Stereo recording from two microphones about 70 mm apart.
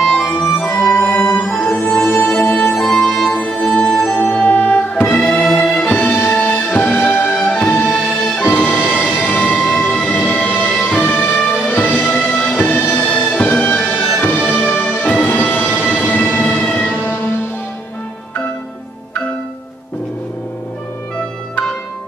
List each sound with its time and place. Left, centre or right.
0.0 s music: centre
2.7 s music: centre
4.2 s music: left
5.0 s music: centre
5.6 s music: centre
9.7 s music: centre
10.0 s music: left
14.2 s music: left